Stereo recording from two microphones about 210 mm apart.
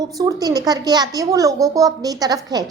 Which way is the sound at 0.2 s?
15° right (ahead or behind).